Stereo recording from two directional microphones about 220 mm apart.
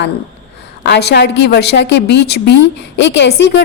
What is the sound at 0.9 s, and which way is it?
A woman's voice, 50° left (ahead or behind).